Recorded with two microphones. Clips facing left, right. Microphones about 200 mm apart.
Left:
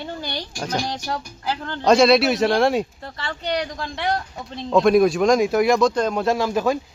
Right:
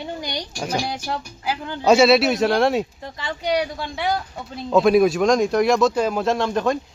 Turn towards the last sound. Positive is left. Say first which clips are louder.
# even
turn(degrees=5)  # may be behind; listen again after turning